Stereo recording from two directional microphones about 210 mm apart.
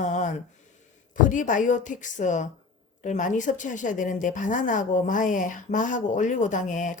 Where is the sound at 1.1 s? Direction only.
40° left (ahead or behind).